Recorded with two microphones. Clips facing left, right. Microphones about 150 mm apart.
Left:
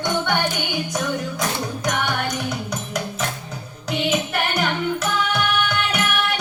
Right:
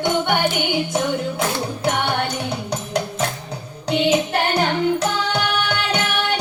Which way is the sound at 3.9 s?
30° right (ahead or behind).